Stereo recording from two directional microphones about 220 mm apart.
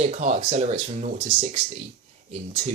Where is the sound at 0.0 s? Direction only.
30° right (ahead or behind).